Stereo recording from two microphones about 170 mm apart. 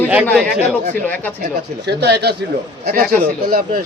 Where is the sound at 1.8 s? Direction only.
85° right.